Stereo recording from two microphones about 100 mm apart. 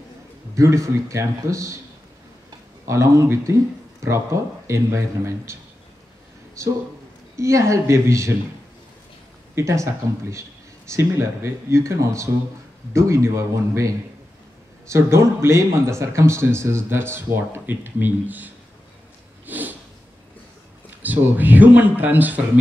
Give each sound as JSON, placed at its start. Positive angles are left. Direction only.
{"t": 0.6, "sound": "a man's voice", "side_deg": -30}
{"t": 2.9, "sound": "a man's voice", "side_deg": -30}
{"t": 9.6, "sound": "speech", "side_deg": -30}
{"t": 10.9, "sound": "speech", "side_deg": -30}
{"t": 19.4, "sound": "sniff", "side_deg": -15}
{"t": 21.0, "sound": "speech", "side_deg": -15}